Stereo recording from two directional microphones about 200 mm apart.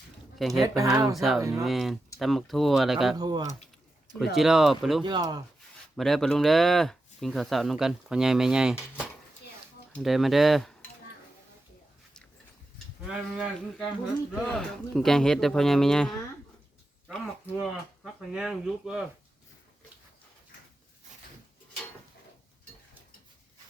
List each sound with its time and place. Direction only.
0.3 s speech: centre (ahead or behind)
0.8 s speech: 15° right (ahead or behind)
1.1 s speech: centre (ahead or behind)
1.4 s speech: 15° right (ahead or behind)
1.6 s speech: centre (ahead or behind)
3.2 s speech: 20° right (ahead or behind)
4.4 s speech: centre (ahead or behind)
5.0 s speech: 20° right (ahead or behind)
6.0 s speech: centre (ahead or behind)
9.9 s speech: centre (ahead or behind)
13.1 s speech: centre (ahead or behind)